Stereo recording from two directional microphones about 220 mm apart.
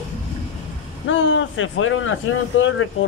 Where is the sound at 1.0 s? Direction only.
60° left (ahead or behind).